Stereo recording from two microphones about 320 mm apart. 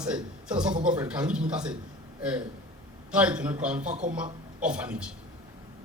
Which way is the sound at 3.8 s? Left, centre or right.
Right.